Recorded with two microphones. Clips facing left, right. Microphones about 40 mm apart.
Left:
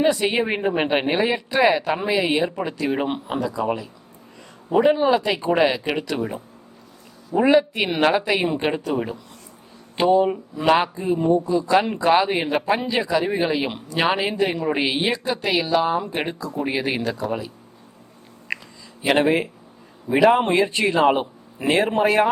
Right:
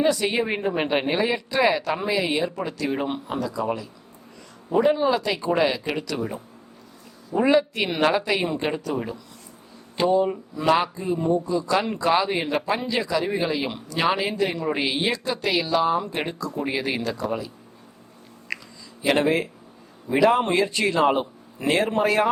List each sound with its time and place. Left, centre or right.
0.0 s speech: left
7.3 s speech: centre
10.0 s speech: left
18.5 s a sound: left
19.0 s speech: left